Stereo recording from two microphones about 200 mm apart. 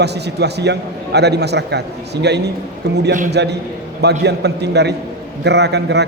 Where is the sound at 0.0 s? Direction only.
55° right (ahead or behind).